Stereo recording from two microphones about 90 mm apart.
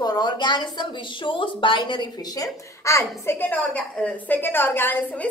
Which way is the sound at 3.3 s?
20° left (ahead or behind).